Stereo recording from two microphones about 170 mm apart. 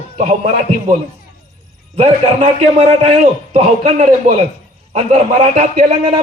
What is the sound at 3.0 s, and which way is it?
A man's voice, 40° right (ahead or behind).